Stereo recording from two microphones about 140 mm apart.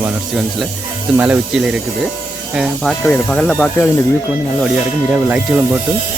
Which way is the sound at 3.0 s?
10° left (ahead or behind).